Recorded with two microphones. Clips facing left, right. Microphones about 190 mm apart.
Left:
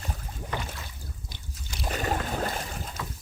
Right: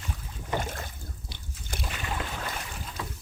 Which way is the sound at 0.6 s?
50° right (ahead or behind).